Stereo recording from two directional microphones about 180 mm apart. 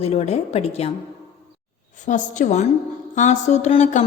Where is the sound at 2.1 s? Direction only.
45° left (ahead or behind).